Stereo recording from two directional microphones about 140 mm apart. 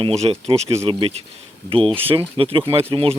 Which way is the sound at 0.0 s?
45° right (ahead or behind).